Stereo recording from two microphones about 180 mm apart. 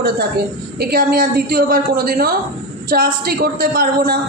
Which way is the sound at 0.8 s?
60° right (ahead or behind).